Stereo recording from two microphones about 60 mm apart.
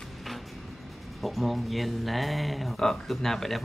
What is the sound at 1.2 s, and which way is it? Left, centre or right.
Speech, centre.